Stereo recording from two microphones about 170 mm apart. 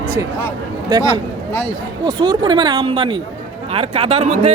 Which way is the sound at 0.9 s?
25° right (ahead or behind).